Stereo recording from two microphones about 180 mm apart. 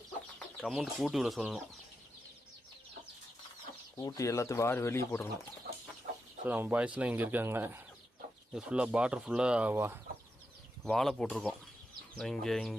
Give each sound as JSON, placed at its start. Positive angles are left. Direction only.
{"t": 0.3, "sound": "speech", "side_deg": 5}
{"t": 3.9, "sound": "speech", "side_deg": 20}
{"t": 6.0, "sound": "chicken", "side_deg": -55}
{"t": 6.4, "sound": "speech", "side_deg": -10}
{"t": 10.8, "sound": "speech", "side_deg": 0}